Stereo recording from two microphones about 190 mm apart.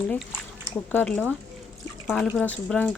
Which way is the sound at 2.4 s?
5° left (ahead or behind).